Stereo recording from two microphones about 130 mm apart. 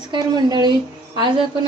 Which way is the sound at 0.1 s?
35° right (ahead or behind).